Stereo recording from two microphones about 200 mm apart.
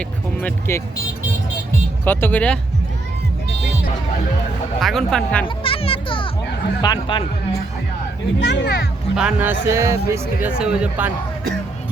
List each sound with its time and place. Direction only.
0.7 s speech: 10° left (ahead or behind)
2.0 s speech: 10° left (ahead or behind)
4.8 s speech: centre (ahead or behind)
5.5 s music: 25° left (ahead or behind)
6.8 s a man's voice: 25° left (ahead or behind)
8.4 s speech: 60° left (ahead or behind)
9.1 s speech: 5° right (ahead or behind)